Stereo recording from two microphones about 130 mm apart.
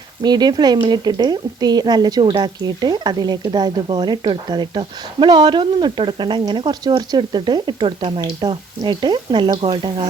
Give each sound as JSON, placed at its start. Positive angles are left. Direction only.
{"t": 0.2, "sound": "a woman's voice", "side_deg": -30}